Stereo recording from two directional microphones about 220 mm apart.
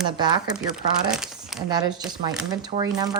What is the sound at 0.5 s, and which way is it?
Speech, 5° right (ahead or behind).